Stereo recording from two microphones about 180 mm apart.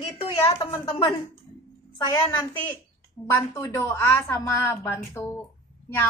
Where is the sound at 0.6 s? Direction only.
25° left (ahead or behind).